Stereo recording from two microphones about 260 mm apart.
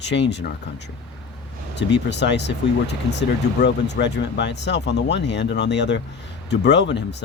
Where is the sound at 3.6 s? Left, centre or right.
Left.